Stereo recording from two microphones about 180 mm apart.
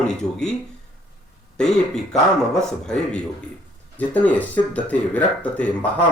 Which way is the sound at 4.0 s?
5° left (ahead or behind).